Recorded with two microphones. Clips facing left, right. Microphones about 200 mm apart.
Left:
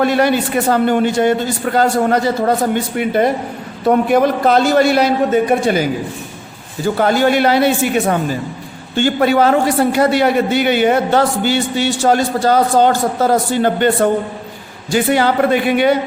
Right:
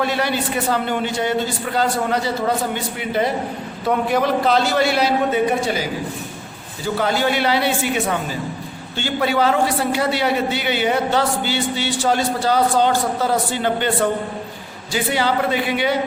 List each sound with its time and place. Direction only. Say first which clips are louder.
0.0 s a man's voice: left 7 dB; 50° left (ahead or behind)